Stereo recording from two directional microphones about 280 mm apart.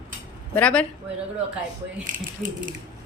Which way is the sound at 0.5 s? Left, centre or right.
Centre.